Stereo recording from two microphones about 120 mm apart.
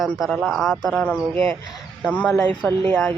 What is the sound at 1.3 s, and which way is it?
Speech, 45° right (ahead or behind).